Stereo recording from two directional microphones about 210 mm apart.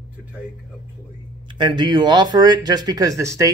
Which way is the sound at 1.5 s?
20° right (ahead or behind).